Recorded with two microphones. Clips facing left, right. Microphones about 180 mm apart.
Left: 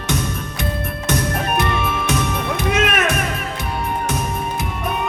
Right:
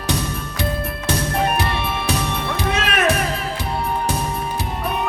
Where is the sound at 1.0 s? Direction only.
30° right (ahead or behind).